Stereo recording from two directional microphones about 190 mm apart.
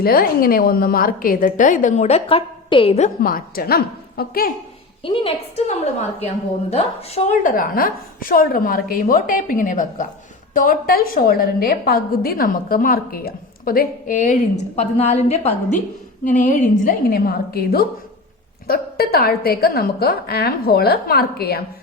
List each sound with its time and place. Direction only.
0.0 s a woman's voice: 50° left (ahead or behind); by 3.1 s 30° left (ahead or behind)
3.2 s a woman's voice: 50° left (ahead or behind)
5.0 s a woman's voice: 30° left (ahead or behind); by 21.6 s 55° left (ahead or behind)